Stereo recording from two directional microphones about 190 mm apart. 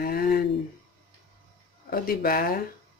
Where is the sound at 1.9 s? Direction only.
50° left (ahead or behind).